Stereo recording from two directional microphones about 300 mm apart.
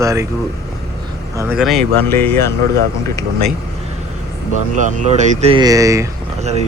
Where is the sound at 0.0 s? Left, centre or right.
Centre.